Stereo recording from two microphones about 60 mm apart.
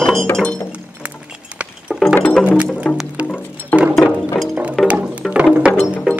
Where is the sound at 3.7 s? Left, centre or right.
Left.